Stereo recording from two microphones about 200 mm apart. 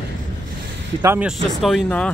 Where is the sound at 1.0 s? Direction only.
10° right (ahead or behind).